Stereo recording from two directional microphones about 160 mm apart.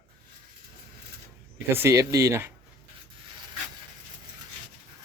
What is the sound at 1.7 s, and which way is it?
Speech, 15° right (ahead or behind).